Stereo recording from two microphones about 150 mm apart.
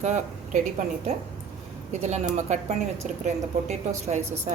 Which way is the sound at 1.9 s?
50° right (ahead or behind).